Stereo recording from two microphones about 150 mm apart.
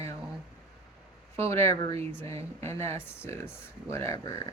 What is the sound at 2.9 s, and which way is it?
Speech, 15° left (ahead or behind).